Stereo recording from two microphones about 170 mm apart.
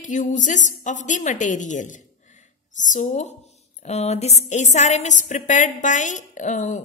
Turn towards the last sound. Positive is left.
turn(degrees=45)  # may be behind; listen again after turning